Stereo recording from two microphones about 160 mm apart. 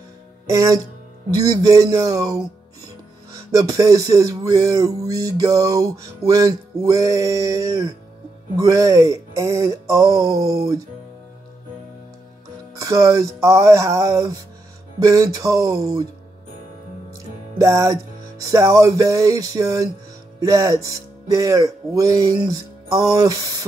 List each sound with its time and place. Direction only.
0.5 s speech: 20° right (ahead or behind)
12.7 s speech: 20° right (ahead or behind)
17.6 s speech: 20° right (ahead or behind)